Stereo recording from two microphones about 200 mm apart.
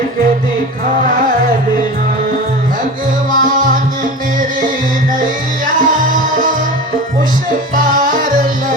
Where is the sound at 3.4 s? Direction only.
40° right (ahead or behind).